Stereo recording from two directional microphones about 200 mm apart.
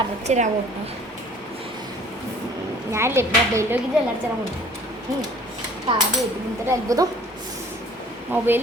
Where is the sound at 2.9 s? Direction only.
15° right (ahead or behind).